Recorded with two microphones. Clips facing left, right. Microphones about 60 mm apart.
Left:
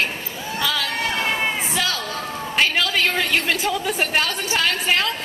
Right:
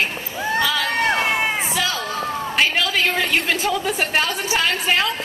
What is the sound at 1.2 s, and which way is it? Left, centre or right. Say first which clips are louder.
Speech: right 2 dB; right.